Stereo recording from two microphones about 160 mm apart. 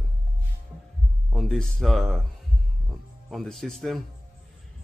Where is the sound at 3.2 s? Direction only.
Centre (ahead or behind).